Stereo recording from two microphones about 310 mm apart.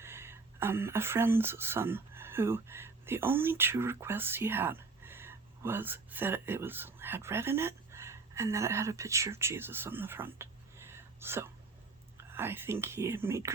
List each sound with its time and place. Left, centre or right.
0.0 s speech: centre